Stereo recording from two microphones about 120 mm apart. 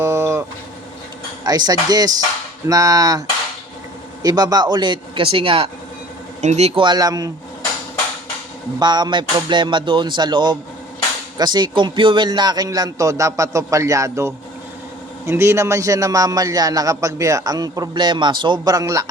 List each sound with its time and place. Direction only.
0.0 s livestock: 25° right (ahead or behind)
1.5 s a man's voice: 35° right (ahead or behind)
6.4 s a man's voice: 65° right (ahead or behind)
6.8 s a man's voice: 35° right (ahead or behind)
8.8 s a man's voice: 35° right (ahead or behind)